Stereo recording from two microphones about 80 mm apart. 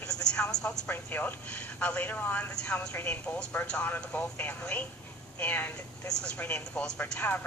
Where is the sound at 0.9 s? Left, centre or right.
Left.